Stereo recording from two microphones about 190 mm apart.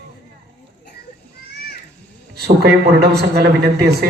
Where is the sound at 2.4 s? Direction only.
60° right (ahead or behind).